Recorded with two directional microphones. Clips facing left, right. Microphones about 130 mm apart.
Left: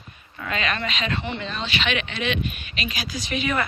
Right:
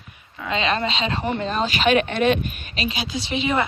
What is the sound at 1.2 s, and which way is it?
Speech, 45° right (ahead or behind).